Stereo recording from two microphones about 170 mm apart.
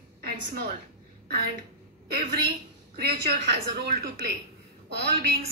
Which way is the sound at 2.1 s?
70° right (ahead or behind).